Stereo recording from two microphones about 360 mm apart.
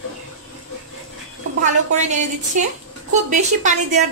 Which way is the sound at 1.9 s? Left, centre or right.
Centre.